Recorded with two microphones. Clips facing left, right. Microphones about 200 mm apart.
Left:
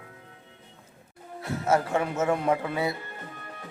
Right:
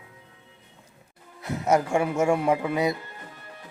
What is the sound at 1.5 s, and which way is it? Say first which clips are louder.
Speech: right 2 dB; 15° right (ahead or behind).